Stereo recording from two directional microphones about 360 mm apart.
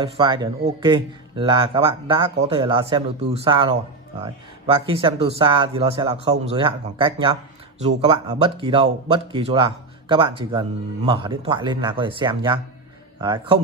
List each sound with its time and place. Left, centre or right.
0.0 s a man's voice: centre